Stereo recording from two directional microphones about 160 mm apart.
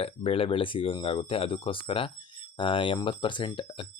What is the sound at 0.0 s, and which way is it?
Speech, 35° left (ahead or behind).